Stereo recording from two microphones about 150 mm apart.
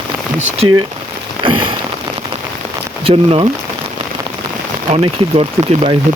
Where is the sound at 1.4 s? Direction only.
35° right (ahead or behind).